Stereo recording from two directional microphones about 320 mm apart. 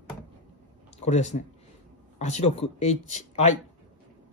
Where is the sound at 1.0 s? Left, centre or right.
Left.